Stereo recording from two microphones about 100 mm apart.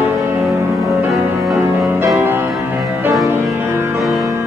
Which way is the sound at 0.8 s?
Centre (ahead or behind).